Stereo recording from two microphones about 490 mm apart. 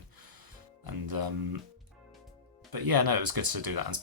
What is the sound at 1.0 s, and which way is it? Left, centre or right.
Music, right.